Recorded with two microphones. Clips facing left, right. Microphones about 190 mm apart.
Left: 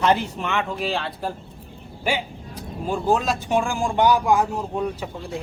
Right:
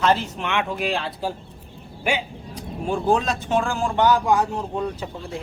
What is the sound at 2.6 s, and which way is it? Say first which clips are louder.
Speech: right 1 dB; 5° left (ahead or behind).